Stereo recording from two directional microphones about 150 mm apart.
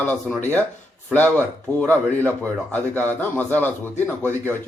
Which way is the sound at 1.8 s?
10° left (ahead or behind).